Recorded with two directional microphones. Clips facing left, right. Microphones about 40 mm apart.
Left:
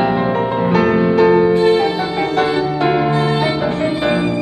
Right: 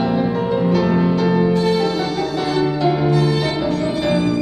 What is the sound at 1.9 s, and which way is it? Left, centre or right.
Music, left.